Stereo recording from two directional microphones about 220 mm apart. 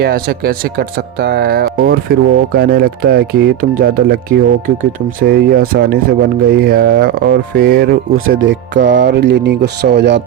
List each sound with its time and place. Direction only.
0.0 s speech: 45° right (ahead or behind)
8.4 s speech: 55° right (ahead or behind)